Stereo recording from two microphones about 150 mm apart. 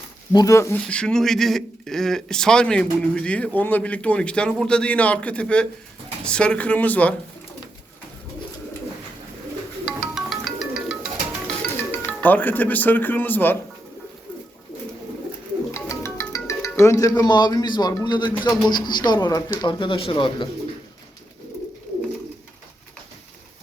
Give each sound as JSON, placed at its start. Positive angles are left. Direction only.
{"t": 0.3, "sound": "speech", "side_deg": 20}
{"t": 0.9, "sound": "speech", "side_deg": 5}
{"t": 9.8, "sound": "music", "side_deg": 0}
{"t": 11.4, "sound": "speech", "side_deg": 10}
{"t": 15.7, "sound": "speech", "side_deg": 20}